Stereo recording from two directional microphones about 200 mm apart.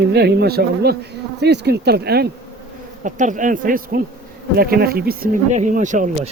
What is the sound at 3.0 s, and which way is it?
A man's voice, 40° right (ahead or behind).